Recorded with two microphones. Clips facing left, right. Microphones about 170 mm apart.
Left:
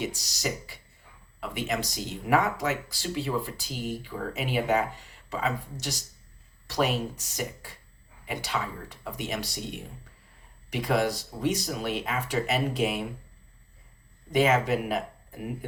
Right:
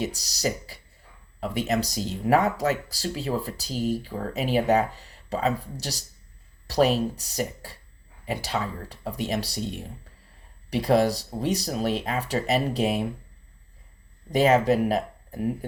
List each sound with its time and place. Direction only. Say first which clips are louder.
0.0 s speech: right 4 dB; 35° right (ahead or behind)
10.7 s speech: right 5 dB; 35° right (ahead or behind)
14.3 s speech: right 4 dB; 35° right (ahead or behind)